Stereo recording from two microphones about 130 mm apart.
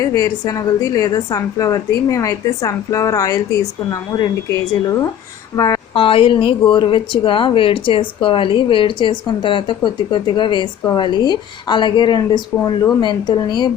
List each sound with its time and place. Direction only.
0.0 s a woman's voice: 25° left (ahead or behind)
5.9 s a woman's voice: 45° left (ahead or behind)